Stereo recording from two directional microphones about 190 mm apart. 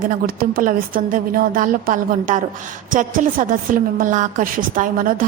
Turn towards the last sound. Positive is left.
turn(degrees=-45)  # may be behind; listen again after turning